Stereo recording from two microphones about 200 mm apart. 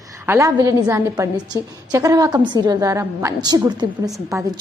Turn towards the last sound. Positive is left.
turn(degrees=-15)  # may be behind; listen again after turning